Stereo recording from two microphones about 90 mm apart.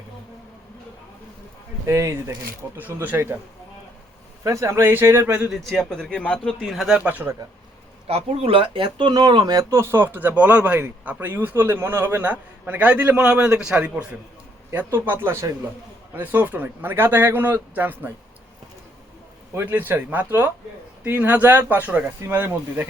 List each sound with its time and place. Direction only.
1.9 s speech: 35° right (ahead or behind)
2.7 s speech: 20° right (ahead or behind)
4.4 s speech: 35° right (ahead or behind)
5.5 s speech: centre (ahead or behind)
6.9 s speech: 15° right (ahead or behind)
8.0 s speech: 90° right; by 9.6 s 45° right (ahead or behind)
9.6 s a man's voice: 30° right (ahead or behind)
16.1 s speech: 20° right (ahead or behind)
19.5 s a man's voice: 20° right (ahead or behind)